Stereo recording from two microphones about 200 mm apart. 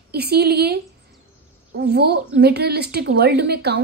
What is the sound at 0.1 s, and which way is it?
Speech, 55° right (ahead or behind).